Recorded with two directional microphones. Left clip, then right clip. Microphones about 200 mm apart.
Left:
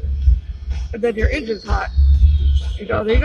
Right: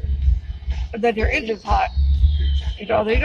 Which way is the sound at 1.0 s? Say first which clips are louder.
Even; 55° right (ahead or behind).